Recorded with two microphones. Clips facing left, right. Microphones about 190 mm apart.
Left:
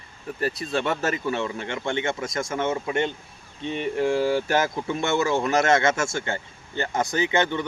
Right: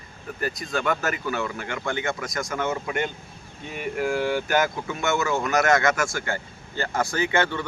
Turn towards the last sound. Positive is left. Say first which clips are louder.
# left 1 dB
turn(degrees=20)  # may be behind; listen again after turning